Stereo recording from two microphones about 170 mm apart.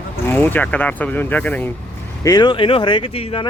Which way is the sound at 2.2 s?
25° left (ahead or behind).